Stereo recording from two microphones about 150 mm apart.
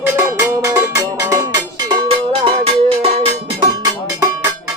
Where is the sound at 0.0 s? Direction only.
15° right (ahead or behind).